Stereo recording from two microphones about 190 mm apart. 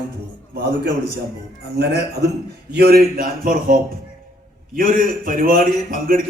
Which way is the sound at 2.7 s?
55° right (ahead or behind).